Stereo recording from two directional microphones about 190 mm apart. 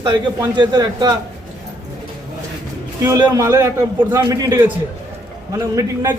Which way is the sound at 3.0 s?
20° right (ahead or behind).